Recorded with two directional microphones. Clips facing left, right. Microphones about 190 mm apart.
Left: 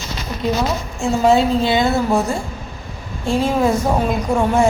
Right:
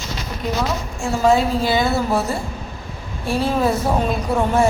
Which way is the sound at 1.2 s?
25° left (ahead or behind).